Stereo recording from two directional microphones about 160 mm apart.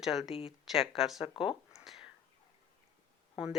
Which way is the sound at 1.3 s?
30° left (ahead or behind).